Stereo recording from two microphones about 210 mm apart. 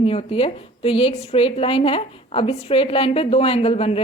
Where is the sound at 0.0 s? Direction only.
25° left (ahead or behind).